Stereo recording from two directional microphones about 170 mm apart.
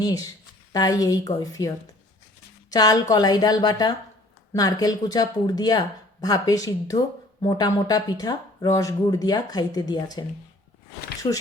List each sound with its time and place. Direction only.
0.7 s speech: 20° left (ahead or behind)
11.2 s speech: 30° left (ahead or behind)